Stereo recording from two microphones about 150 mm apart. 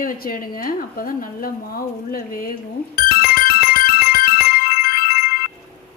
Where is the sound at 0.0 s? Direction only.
70° left (ahead or behind).